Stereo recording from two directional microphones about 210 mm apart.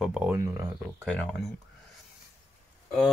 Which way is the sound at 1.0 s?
5° left (ahead or behind).